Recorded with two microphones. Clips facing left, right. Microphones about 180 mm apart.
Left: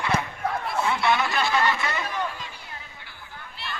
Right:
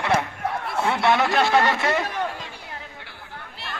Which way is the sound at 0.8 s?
65° right (ahead or behind).